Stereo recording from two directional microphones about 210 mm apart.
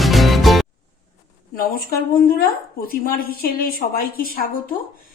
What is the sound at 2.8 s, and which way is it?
A woman's voice, 45° left (ahead or behind).